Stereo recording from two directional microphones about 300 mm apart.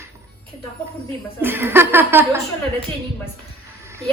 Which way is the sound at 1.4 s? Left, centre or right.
Centre.